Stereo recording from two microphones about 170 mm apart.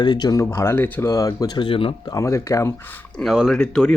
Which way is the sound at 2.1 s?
20° left (ahead or behind).